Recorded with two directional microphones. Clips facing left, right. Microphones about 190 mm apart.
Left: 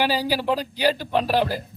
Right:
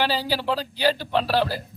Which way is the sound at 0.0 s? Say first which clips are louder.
Left 2 dB; 10° left (ahead or behind).